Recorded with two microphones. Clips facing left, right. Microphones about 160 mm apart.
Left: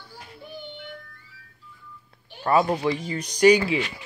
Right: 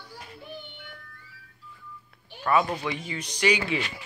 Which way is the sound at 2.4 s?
30° left (ahead or behind).